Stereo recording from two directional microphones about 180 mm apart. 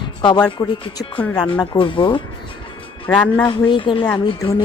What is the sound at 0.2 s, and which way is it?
A woman's voice, 25° left (ahead or behind).